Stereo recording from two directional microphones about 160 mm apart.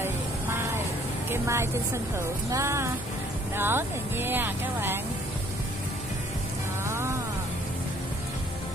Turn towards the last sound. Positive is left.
turn(degrees=-15)  # may be behind; listen again after turning